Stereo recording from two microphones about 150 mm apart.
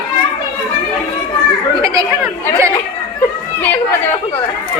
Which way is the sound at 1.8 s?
20° right (ahead or behind).